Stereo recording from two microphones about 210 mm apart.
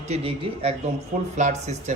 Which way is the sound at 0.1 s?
25° right (ahead or behind).